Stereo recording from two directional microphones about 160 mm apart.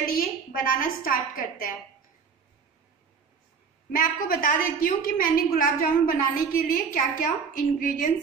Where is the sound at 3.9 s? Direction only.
60° left (ahead or behind).